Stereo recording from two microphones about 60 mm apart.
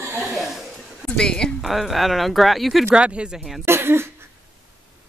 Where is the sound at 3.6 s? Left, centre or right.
Right.